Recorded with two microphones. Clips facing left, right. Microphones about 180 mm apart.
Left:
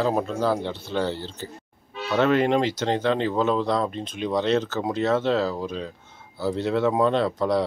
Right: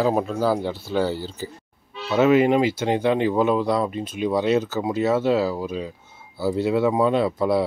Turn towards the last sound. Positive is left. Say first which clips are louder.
# right 2 dB
turn(degrees=-10)  # may be behind; listen again after turning